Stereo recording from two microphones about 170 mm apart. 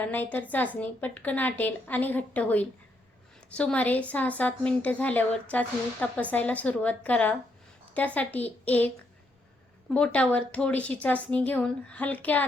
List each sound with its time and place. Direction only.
0.0 s a woman's voice: 10° left (ahead or behind)
9.9 s a woman's voice: 5° left (ahead or behind)